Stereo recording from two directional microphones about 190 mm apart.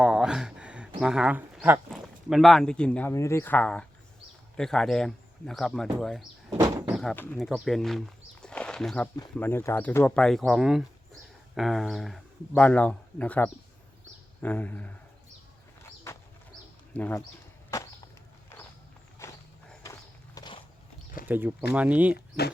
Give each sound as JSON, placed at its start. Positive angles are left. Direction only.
{"t": 0.0, "sound": "a sound", "side_deg": -5}
{"t": 1.9, "sound": "speech", "side_deg": 0}
{"t": 16.1, "sound": "bird", "side_deg": 15}
{"t": 16.9, "sound": "speech", "side_deg": 5}
{"t": 17.7, "sound": "a sound", "side_deg": 15}
{"t": 19.2, "sound": "walk", "side_deg": 15}
{"t": 19.8, "sound": "horse", "side_deg": 15}
{"t": 21.2, "sound": "speech", "side_deg": -10}
{"t": 22.1, "sound": "speech", "side_deg": 55}